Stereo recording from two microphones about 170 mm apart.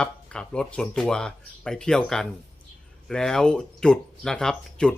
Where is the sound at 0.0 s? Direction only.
5° left (ahead or behind).